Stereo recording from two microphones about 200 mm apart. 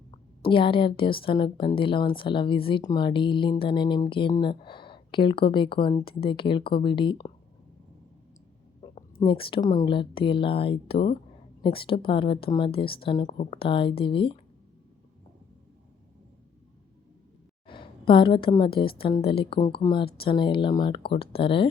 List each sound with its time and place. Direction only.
0.1 s speech: 25° left (ahead or behind)
9.2 s speech: 25° left (ahead or behind)
17.7 s a woman's voice: 25° left (ahead or behind)